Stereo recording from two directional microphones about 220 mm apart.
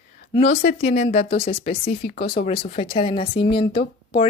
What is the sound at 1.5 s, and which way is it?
Speech, 25° left (ahead or behind).